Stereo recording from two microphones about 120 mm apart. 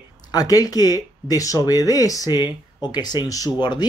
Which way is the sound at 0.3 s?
30° left (ahead or behind).